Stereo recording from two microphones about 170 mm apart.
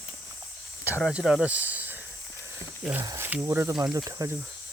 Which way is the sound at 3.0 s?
20° right (ahead or behind).